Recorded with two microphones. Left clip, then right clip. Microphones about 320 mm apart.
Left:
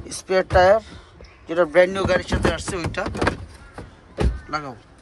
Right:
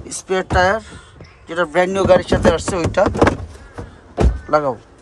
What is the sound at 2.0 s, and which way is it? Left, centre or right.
A man's voice, centre.